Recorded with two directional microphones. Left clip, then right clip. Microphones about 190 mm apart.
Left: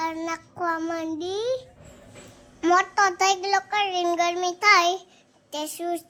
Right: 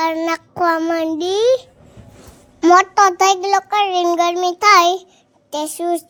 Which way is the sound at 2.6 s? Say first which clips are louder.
Right 9 dB; 25° right (ahead or behind).